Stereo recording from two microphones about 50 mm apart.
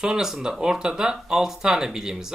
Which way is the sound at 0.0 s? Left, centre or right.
Centre.